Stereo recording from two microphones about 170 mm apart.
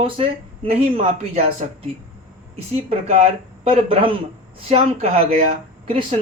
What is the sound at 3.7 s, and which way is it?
A woman's voice, 35° right (ahead or behind).